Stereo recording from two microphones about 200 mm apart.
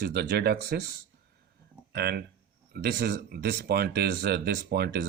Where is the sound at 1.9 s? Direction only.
55° right (ahead or behind).